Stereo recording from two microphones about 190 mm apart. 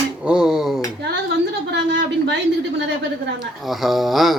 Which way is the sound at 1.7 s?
65° right (ahead or behind).